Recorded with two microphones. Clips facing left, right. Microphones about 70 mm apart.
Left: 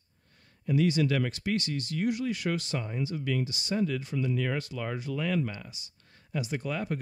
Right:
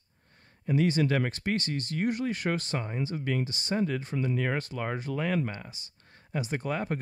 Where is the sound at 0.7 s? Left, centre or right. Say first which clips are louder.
Even; right.